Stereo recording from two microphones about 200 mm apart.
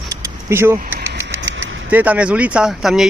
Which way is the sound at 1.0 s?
60° right (ahead or behind).